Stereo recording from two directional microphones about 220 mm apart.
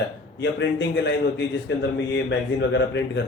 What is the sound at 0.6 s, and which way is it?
A man's voice, 55° left (ahead or behind).